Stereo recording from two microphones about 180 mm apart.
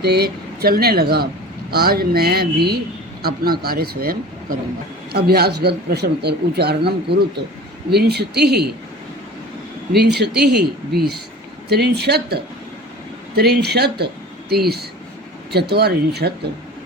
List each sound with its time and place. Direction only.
0.0 s speech: 60° right (ahead or behind)
9.9 s speech: 65° right (ahead or behind)